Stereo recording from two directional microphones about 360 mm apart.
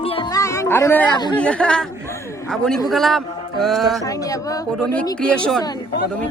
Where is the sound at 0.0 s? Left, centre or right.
Centre.